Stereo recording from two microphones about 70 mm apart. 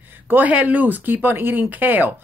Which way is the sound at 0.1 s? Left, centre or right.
Right.